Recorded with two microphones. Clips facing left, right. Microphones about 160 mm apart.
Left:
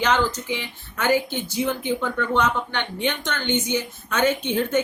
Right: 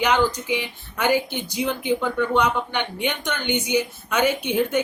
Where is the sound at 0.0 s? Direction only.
15° right (ahead or behind).